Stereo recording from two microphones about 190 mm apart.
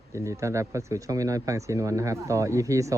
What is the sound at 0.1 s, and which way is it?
Speech, 15° right (ahead or behind).